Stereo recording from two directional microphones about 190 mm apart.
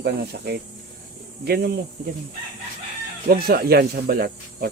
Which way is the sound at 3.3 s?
55° right (ahead or behind).